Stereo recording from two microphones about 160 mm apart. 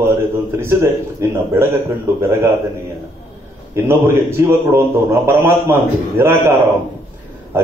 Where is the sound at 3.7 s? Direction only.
15° right (ahead or behind).